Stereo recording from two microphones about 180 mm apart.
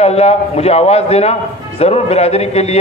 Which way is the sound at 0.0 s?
35° left (ahead or behind).